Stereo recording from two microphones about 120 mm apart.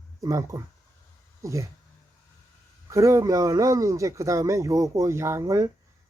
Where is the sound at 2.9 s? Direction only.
25° right (ahead or behind).